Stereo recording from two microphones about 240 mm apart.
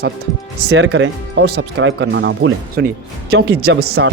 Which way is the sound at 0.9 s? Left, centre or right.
Right.